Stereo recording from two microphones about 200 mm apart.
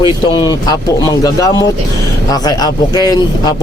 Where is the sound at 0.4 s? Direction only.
20° left (ahead or behind).